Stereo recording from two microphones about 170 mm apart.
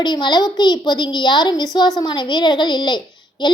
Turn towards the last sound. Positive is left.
turn(degrees=25)  # may be behind; listen again after turning